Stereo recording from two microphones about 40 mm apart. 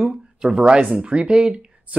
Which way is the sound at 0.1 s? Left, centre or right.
Centre.